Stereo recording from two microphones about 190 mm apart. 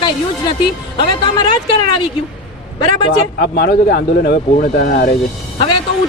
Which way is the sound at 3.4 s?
55° left (ahead or behind).